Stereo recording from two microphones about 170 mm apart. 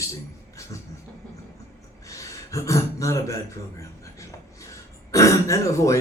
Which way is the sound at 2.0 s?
20° left (ahead or behind).